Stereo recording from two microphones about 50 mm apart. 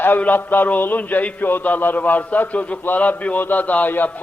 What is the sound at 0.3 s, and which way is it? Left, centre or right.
A man's voice, left.